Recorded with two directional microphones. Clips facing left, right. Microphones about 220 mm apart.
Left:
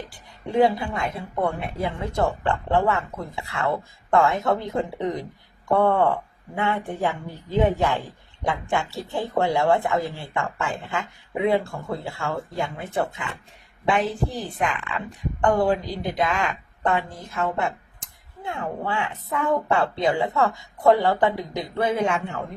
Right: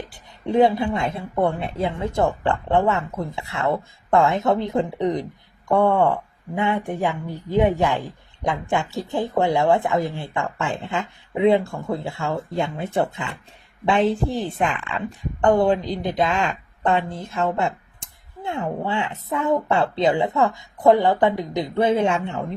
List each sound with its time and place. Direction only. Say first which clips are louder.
0.1 s speech: right 5 dB; 20° right (ahead or behind)